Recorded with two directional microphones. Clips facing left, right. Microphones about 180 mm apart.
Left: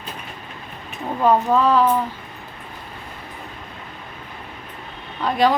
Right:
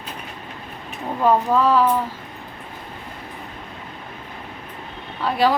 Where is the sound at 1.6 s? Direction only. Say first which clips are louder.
Right 1 dB; 10° right (ahead or behind).